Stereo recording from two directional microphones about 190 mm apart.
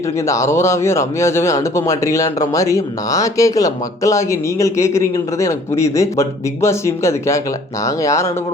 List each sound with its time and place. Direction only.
0.3 s a man's voice: 15° left (ahead or behind)